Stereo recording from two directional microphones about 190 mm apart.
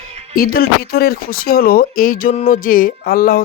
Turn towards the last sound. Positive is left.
turn(degrees=50)  # may be behind; listen again after turning